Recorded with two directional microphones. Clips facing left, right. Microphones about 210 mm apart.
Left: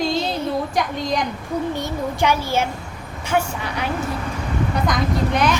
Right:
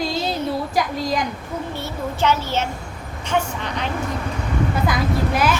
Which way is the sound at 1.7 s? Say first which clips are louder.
Left 3 dB; 15° left (ahead or behind).